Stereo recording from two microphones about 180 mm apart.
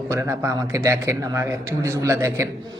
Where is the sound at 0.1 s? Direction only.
15° right (ahead or behind).